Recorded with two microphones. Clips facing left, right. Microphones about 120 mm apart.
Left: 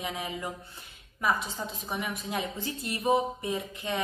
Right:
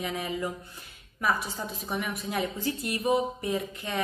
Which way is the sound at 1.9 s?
15° left (ahead or behind).